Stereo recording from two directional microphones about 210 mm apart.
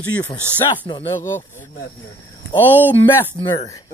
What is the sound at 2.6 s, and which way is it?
Speech, 10° right (ahead or behind).